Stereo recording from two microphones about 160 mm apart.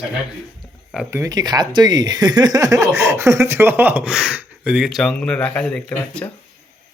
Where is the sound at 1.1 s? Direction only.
20° right (ahead or behind); by 6.3 s 5° left (ahead or behind).